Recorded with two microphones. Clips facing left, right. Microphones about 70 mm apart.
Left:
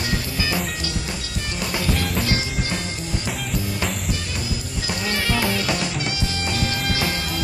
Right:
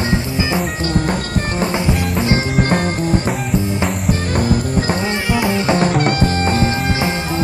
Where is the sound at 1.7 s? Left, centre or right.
Right.